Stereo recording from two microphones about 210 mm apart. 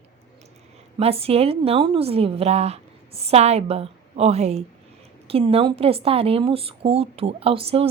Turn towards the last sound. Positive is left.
turn(degrees=-25)  # may be behind; listen again after turning